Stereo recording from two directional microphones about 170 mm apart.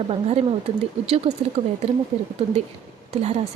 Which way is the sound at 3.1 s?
40° right (ahead or behind).